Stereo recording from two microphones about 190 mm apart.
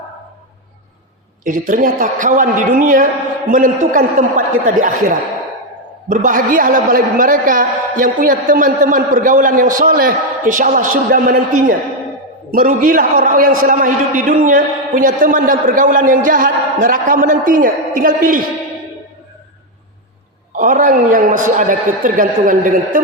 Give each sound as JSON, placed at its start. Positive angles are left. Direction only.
{"t": 1.5, "sound": "a man's voice", "side_deg": -45}
{"t": 20.6, "sound": "a man's voice", "side_deg": -45}